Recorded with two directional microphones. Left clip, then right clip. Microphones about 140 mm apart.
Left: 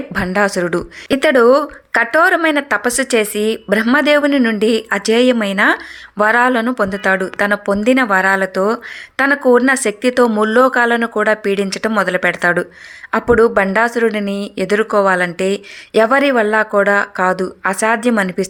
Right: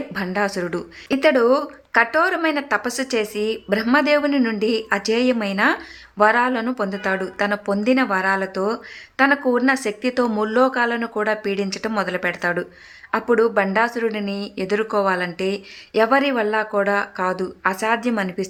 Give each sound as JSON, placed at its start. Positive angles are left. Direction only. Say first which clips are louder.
{"t": 0.1, "sound": "speech", "louder": "left 8 dB", "side_deg": 30}